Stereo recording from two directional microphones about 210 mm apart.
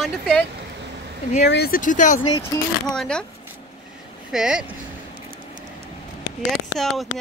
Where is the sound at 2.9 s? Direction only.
5° left (ahead or behind).